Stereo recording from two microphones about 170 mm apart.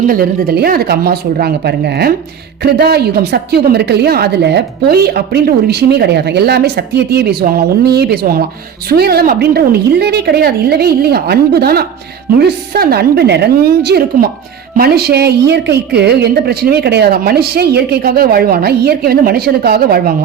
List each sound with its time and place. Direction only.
0.0 s a woman's voice: 55° right (ahead or behind)